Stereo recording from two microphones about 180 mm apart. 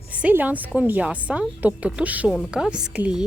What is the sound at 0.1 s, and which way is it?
A woman's voice, 10° right (ahead or behind).